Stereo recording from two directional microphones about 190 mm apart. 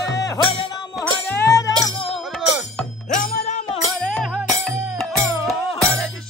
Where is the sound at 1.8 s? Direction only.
25° left (ahead or behind).